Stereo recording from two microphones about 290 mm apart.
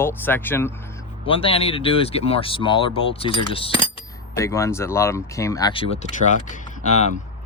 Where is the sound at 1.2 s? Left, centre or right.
Centre.